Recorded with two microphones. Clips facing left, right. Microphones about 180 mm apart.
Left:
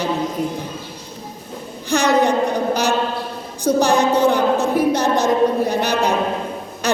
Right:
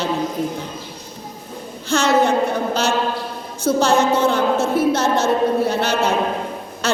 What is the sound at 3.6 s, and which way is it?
A woman's voice, 15° left (ahead or behind).